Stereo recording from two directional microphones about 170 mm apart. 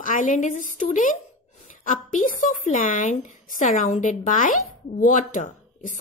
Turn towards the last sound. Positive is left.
turn(degrees=50)  # may be behind; listen again after turning